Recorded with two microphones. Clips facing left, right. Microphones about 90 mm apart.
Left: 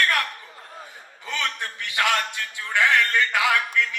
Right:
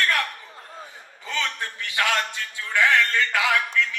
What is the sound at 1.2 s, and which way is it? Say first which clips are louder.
A man's voice: even; 20° left (ahead or behind).